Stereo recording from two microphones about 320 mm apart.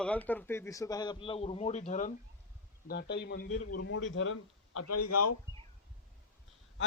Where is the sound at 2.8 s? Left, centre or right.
Left.